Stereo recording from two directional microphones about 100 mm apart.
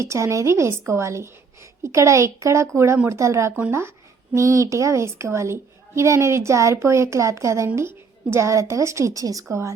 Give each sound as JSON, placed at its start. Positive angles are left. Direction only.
{"t": 0.0, "sound": "a woman's voice", "side_deg": -30}